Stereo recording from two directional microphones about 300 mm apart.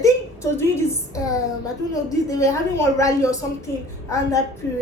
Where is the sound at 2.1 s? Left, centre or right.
Centre.